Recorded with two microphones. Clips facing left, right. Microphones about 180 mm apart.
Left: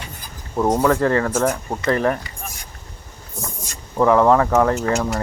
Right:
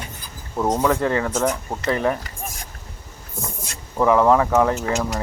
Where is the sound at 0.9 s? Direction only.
5° right (ahead or behind).